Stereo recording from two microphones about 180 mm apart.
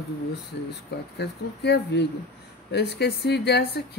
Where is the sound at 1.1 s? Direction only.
65° left (ahead or behind).